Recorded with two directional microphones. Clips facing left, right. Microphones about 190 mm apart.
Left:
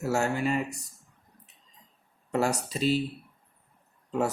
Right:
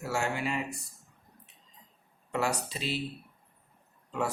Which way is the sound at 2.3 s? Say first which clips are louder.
Left 4 dB; 40° left (ahead or behind).